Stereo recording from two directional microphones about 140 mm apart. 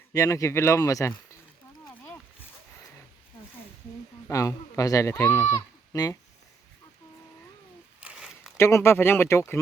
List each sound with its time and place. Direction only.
0.1 s speech: 25° left (ahead or behind)
4.3 s speech: 25° left (ahead or behind)
8.0 s a sound: 5° right (ahead or behind)
8.5 s speech: 20° left (ahead or behind)